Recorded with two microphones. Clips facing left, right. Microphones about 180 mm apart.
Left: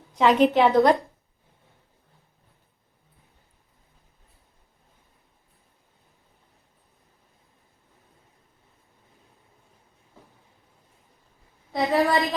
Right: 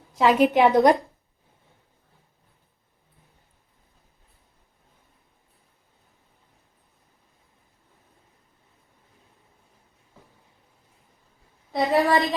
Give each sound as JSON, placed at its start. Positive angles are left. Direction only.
{"t": 0.1, "sound": "a woman's voice", "side_deg": 0}
{"t": 0.5, "sound": "a woman's voice", "side_deg": -15}
{"t": 11.7, "sound": "a sound", "side_deg": 0}